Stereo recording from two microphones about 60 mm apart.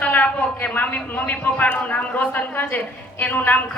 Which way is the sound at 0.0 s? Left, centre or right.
Left.